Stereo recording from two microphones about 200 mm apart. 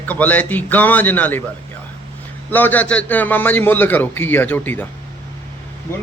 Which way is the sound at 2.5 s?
10° left (ahead or behind).